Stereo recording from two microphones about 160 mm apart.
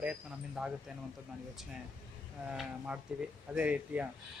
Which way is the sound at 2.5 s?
5° right (ahead or behind).